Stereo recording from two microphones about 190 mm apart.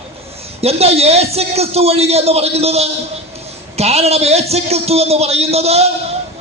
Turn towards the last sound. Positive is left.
turn(degrees=-35)  # may be behind; listen again after turning